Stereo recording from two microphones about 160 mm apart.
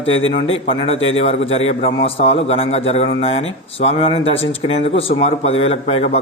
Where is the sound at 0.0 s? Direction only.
35° left (ahead or behind).